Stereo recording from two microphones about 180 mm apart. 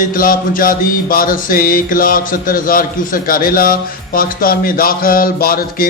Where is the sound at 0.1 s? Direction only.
50° left (ahead or behind).